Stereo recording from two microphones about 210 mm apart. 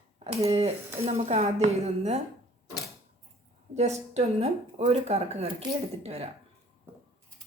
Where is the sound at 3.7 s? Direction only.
30° right (ahead or behind).